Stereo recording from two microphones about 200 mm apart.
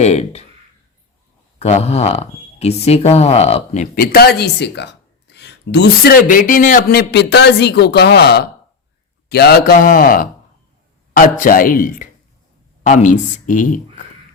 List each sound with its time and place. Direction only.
0.0 s a sound: 35° left (ahead or behind)
1.5 s speech: 30° left (ahead or behind)
3.9 s a man's voice: 50° left (ahead or behind)
11.3 s a man's voice: 45° left (ahead or behind)